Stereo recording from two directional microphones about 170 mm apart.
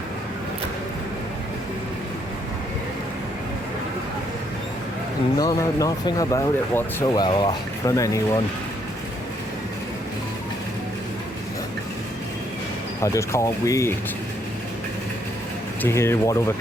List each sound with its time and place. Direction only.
5.4 s speech: 20° left (ahead or behind)
13.0 s speech: 15° left (ahead or behind)
15.8 s speech: 15° left (ahead or behind)